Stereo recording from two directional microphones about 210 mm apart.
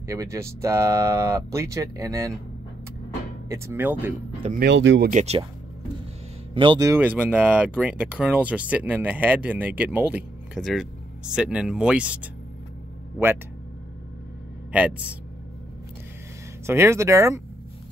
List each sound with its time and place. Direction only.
0.0 s speech: 15° right (ahead or behind)
3.4 s speech: 15° right (ahead or behind)
4.6 s speech: 60° right (ahead or behind)
5.1 s speech: 30° right (ahead or behind)
6.5 s speech: 25° right (ahead or behind); by 12.3 s 5° right (ahead or behind)
14.7 s speech: 5° right (ahead or behind)
16.6 s speech: 10° right (ahead or behind)